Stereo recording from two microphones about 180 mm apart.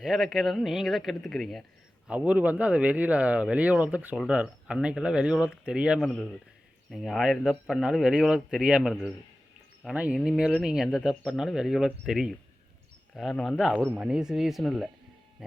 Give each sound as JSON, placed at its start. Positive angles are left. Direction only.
{"t": 0.0, "sound": "speech", "side_deg": 0}